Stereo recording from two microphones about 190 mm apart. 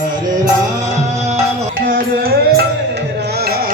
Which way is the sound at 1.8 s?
50° right (ahead or behind).